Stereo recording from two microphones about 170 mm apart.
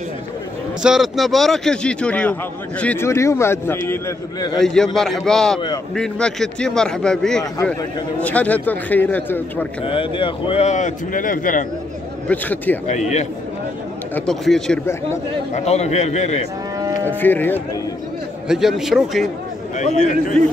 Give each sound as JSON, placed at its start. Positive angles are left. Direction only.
{"t": 0.8, "sound": "a man's voice", "side_deg": 0}
{"t": 4.6, "sound": "a man's voice", "side_deg": 5}
{"t": 9.8, "sound": "speech", "side_deg": 30}
{"t": 12.3, "sound": "a man's voice", "side_deg": 10}
{"t": 12.8, "sound": "speech", "side_deg": 45}
{"t": 14.1, "sound": "a man's voice", "side_deg": 0}
{"t": 15.5, "sound": "a man's voice", "side_deg": 40}
{"t": 17.2, "sound": "a man's voice", "side_deg": 10}
{"t": 18.5, "sound": "a man's voice", "side_deg": 0}